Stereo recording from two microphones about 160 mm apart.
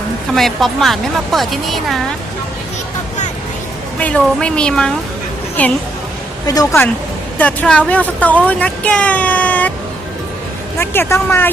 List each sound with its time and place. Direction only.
0.3 s speech: centre (ahead or behind)
3.9 s speech: 5° left (ahead or behind)
6.5 s speech: 25° left (ahead or behind)
7.3 s speech: 10° left (ahead or behind)
10.8 s speech: 15° left (ahead or behind)